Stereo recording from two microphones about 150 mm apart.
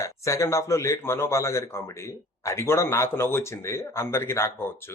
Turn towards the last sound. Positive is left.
turn(degrees=15)  # may be behind; listen again after turning